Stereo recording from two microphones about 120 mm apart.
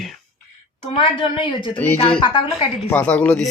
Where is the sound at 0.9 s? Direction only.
45° left (ahead or behind).